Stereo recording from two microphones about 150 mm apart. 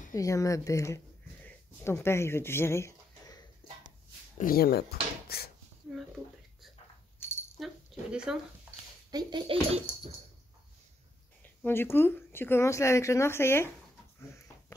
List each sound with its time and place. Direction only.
0.1 s speech: 20° left (ahead or behind)
4.4 s speech: 75° left (ahead or behind)
7.2 s keys jangling: 15° left (ahead or behind)
7.6 s keys jangling: centre (ahead or behind)
8.1 s speech: 5° right (ahead or behind)
9.1 s speech: 30° right (ahead or behind)
11.4 s speech: 15° left (ahead or behind)